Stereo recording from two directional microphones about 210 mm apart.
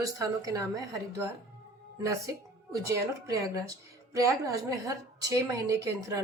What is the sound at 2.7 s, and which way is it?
A woman's voice, 15° right (ahead or behind).